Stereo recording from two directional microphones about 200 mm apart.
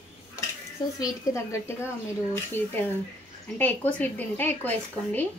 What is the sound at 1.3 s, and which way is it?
A woman's voice, 15° left (ahead or behind).